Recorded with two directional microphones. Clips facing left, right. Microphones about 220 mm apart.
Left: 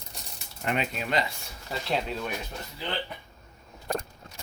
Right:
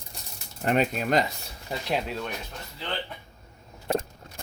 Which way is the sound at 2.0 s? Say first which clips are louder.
Even; centre (ahead or behind).